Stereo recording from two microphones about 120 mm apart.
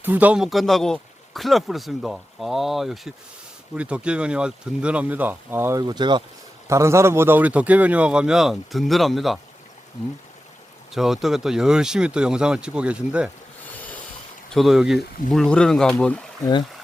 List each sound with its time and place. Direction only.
0.0 s a man's voice: 15° right (ahead or behind)
5.7 s speech: 35° right (ahead or behind)
6.7 s a man's voice: 25° right (ahead or behind); by 9.4 s centre (ahead or behind)
10.9 s a man's voice: centre (ahead or behind)
13.7 s rub: 15° left (ahead or behind)
14.5 s speech: centre (ahead or behind)